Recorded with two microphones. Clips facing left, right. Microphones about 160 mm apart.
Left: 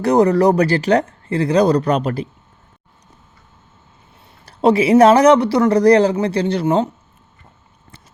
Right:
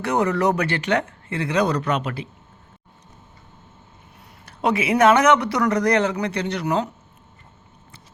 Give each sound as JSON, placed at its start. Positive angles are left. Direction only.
{"t": 0.0, "sound": "a man's voice", "side_deg": 35}
{"t": 4.4, "sound": "a man's voice", "side_deg": 35}